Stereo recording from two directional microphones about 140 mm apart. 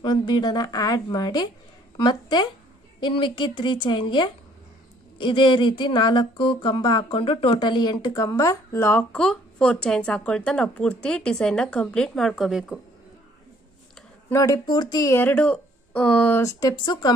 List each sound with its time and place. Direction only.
0.0 s a woman's voice: 35° left (ahead or behind); by 9.0 s 15° left (ahead or behind)
9.1 s speech: 5° left (ahead or behind)
14.3 s speech: 25° left (ahead or behind); by 16.3 s 5° left (ahead or behind)
16.3 s a woman's voice: 25° left (ahead or behind)